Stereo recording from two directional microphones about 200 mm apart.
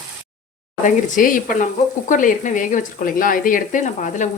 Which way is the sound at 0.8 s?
40° left (ahead or behind).